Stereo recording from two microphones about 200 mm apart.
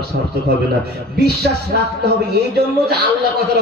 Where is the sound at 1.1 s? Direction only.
55° right (ahead or behind).